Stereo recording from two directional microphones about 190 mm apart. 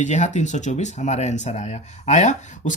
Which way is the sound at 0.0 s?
40° left (ahead or behind).